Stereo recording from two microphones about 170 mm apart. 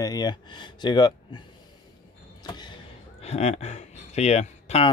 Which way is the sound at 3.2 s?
40° left (ahead or behind).